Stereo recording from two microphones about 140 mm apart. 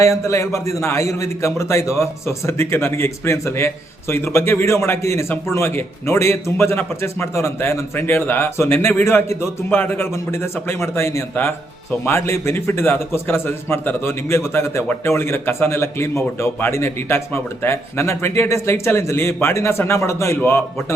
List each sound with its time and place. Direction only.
0.0 s a man's voice: 20° left (ahead or behind)